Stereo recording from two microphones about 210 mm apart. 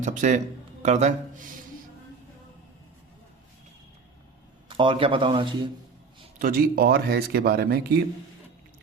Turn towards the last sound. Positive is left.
turn(degrees=-45)  # may be behind; listen again after turning